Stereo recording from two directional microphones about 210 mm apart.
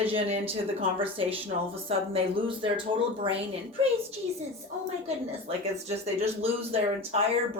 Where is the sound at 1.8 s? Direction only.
25° right (ahead or behind).